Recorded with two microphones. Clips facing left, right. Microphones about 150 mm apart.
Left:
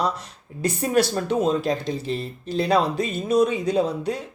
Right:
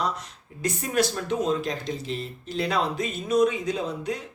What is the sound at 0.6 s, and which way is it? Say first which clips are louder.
Speech: left 4 dB; 30° left (ahead or behind).